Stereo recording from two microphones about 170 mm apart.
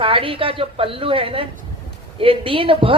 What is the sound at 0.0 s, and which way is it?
Speech, 30° right (ahead or behind).